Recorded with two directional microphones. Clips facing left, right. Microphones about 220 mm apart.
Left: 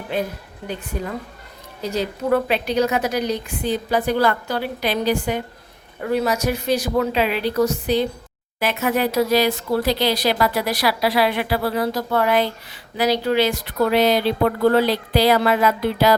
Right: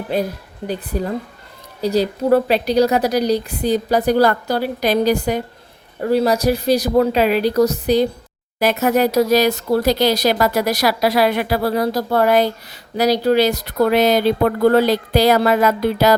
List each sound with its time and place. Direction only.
0.1 s a woman's voice: 35° right (ahead or behind)